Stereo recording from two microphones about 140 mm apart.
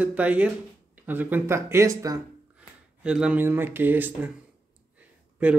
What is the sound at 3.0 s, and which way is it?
Speech, 5° right (ahead or behind).